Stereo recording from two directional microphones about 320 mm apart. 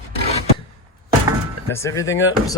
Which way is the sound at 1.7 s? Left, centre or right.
Centre.